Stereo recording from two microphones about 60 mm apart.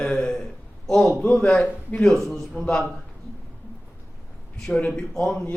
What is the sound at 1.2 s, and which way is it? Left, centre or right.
Speech, centre.